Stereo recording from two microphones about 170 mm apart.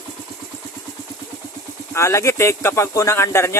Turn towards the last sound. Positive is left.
turn(degrees=15)  # may be behind; listen again after turning